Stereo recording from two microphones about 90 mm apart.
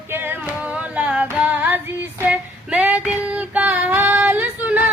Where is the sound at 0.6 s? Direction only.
15° right (ahead or behind).